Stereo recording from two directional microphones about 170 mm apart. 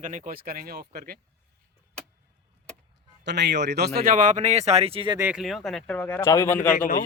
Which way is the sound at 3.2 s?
90° right.